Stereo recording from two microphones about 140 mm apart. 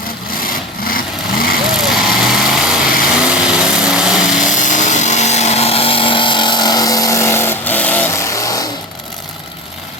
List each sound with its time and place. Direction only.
0.4 s vehicle: 90° left
1.7 s vehicle: centre (ahead or behind)
4.4 s a sound: 65° left (ahead or behind); by 8.7 s 25° left (ahead or behind)